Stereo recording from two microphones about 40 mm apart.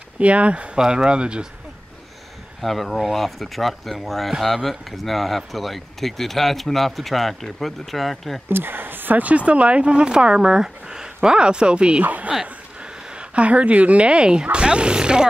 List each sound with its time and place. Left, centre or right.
0.2 s speech: right
0.7 s speech: centre
2.6 s speech: centre
8.5 s speech: right
9.2 s speech: right
12.0 s speech: right
13.1 s speech: right